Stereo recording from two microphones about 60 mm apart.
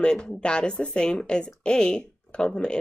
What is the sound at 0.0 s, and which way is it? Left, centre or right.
A woman's voice, centre.